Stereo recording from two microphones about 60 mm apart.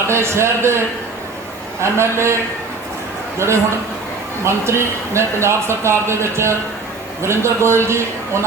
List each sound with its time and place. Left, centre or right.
0.1 s a man's voice: right
1.8 s a man's voice: right
3.3 s a man's voice: right